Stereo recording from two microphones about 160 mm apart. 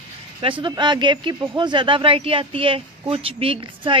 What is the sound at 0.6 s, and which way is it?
A woman's voice, 25° right (ahead or behind).